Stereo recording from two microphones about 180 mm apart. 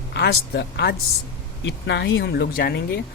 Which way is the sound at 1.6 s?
80° left.